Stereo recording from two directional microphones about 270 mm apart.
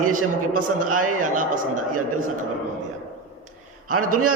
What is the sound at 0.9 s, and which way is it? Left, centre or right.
Speech, right.